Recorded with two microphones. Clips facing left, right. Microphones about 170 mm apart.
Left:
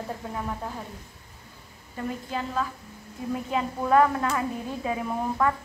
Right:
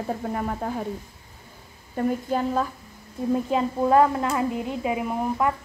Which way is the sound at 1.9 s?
45° right (ahead or behind).